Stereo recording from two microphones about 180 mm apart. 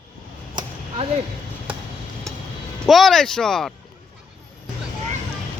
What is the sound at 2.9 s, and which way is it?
Speech, centre (ahead or behind).